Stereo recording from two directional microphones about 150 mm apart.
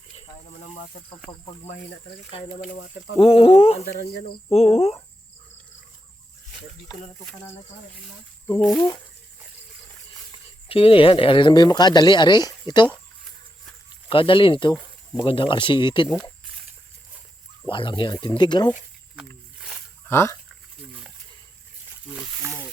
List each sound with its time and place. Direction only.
1.3 s speech: 35° left (ahead or behind)
3.2 s speech: 40° left (ahead or behind)
4.5 s cricket: 45° left (ahead or behind)
10.7 s speech: 40° left (ahead or behind)
14.1 s speech: 35° left (ahead or behind)
17.7 s speech: 35° left (ahead or behind)
19.5 s wild animals: 5° right (ahead or behind)
20.1 s speech: 15° left (ahead or behind)